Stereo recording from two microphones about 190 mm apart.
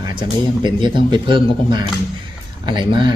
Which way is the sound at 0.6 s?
25° right (ahead or behind).